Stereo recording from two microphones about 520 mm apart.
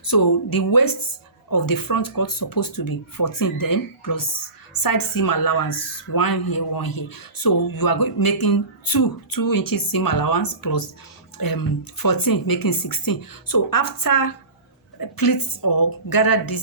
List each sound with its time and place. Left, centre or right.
0.0 s a woman's voice: left